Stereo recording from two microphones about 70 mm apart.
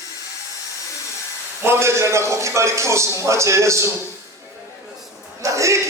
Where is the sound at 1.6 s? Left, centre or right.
Right.